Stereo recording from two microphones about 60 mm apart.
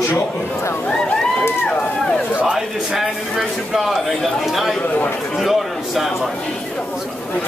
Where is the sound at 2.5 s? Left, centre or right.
Centre.